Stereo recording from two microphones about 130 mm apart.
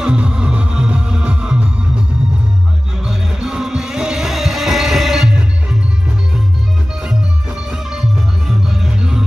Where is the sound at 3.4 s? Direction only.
5° right (ahead or behind).